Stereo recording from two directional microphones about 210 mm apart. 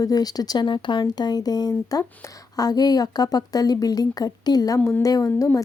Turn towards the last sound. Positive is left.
turn(degrees=10)  # may be behind; listen again after turning